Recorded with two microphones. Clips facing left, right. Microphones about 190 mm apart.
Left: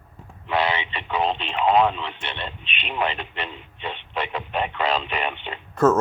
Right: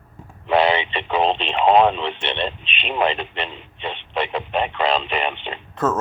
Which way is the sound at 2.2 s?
25° right (ahead or behind).